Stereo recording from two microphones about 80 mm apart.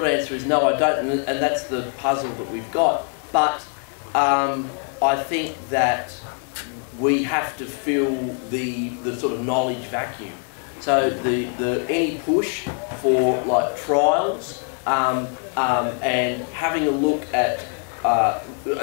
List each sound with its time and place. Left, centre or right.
0.0 s a man's voice: centre